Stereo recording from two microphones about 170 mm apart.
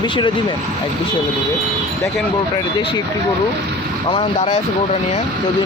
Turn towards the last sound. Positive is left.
turn(degrees=35)  # may be behind; listen again after turning